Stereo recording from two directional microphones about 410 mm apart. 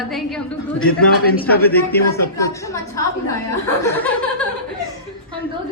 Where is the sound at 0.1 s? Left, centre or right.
Centre.